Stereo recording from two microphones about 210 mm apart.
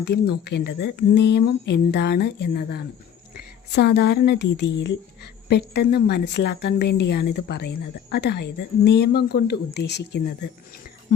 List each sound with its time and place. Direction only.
0.0 s a woman's voice: 50° left (ahead or behind)